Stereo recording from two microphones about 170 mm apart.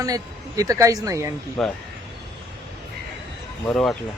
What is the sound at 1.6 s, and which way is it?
Speech, centre (ahead or behind).